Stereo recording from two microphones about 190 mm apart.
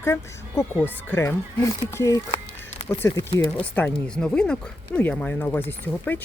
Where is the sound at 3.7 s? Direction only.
5° left (ahead or behind).